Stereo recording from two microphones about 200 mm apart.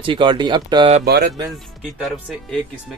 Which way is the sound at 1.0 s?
55° right (ahead or behind).